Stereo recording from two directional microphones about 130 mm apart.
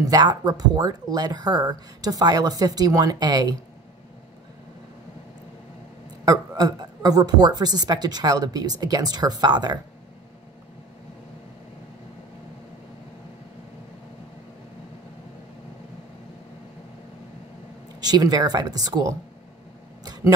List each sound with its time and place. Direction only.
0.0 s a woman's voice: 30° right (ahead or behind)
6.2 s a woman's voice: 30° right (ahead or behind)
18.0 s a woman's voice: 30° right (ahead or behind)